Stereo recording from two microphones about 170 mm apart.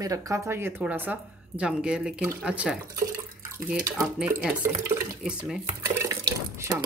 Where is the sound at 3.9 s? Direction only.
Centre (ahead or behind).